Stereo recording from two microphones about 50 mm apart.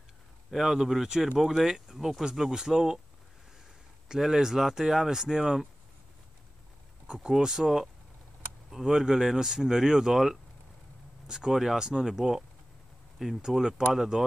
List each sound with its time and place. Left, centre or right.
0.5 s speech: centre
4.1 s speech: centre
7.2 s speech: centre